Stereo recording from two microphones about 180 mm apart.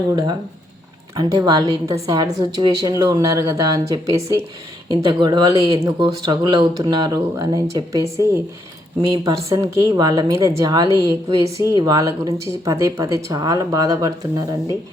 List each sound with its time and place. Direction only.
1.1 s speech: 20° right (ahead or behind)